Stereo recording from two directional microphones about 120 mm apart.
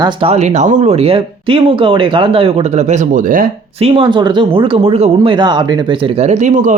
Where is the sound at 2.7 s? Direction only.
85° right.